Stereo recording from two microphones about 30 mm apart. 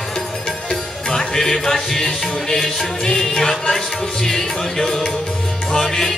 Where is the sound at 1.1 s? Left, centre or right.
Centre.